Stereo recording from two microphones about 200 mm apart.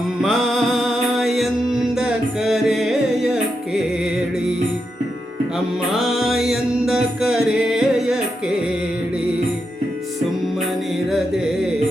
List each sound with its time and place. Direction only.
0.2 s music: centre (ahead or behind)
6.0 s music: centre (ahead or behind)